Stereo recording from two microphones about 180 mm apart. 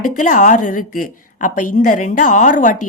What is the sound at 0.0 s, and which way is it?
A woman's voice, 45° left (ahead or behind).